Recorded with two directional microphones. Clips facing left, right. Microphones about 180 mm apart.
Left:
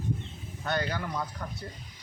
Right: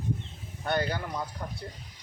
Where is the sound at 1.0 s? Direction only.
20° right (ahead or behind).